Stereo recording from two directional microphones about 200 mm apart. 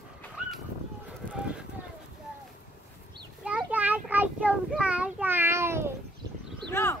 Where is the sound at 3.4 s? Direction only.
5° right (ahead or behind).